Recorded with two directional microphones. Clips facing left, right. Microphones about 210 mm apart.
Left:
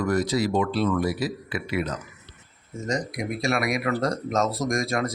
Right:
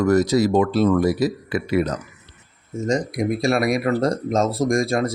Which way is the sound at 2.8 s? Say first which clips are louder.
Right 7 dB; 30° right (ahead or behind).